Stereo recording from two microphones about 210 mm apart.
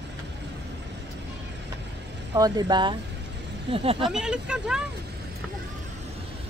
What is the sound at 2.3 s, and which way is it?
Speech, 20° right (ahead or behind).